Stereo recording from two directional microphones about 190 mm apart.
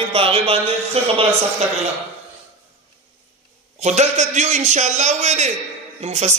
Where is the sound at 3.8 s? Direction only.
35° right (ahead or behind).